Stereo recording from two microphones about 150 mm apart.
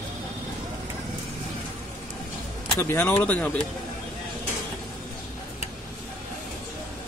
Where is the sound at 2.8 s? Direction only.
10° left (ahead or behind).